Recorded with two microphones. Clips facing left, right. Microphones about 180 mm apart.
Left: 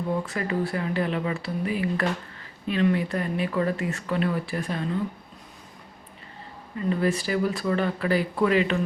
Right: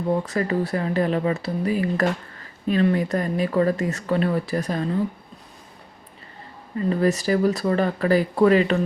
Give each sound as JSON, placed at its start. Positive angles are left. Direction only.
{"t": 0.1, "sound": "speech", "side_deg": -40}
{"t": 6.7, "sound": "speech", "side_deg": -40}